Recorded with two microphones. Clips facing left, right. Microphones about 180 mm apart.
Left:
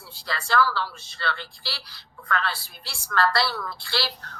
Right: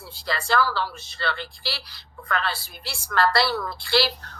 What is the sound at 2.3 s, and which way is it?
Speech, 15° right (ahead or behind).